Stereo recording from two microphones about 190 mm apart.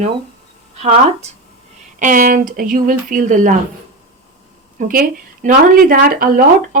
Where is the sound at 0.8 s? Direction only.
35° right (ahead or behind).